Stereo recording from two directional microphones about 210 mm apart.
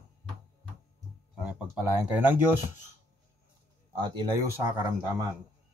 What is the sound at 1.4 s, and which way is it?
Speech, 5° right (ahead or behind).